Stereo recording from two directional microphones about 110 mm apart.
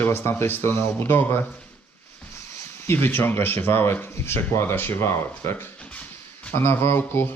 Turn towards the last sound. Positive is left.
turn(degrees=20)  # may be behind; listen again after turning